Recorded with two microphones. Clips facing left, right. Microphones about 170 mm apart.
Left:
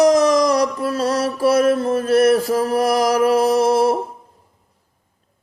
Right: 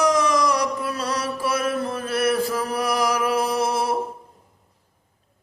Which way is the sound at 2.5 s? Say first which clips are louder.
Left 7 dB; 40° left (ahead or behind).